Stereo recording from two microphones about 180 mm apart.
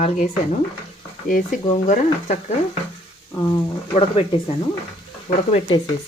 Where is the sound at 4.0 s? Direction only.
30° left (ahead or behind).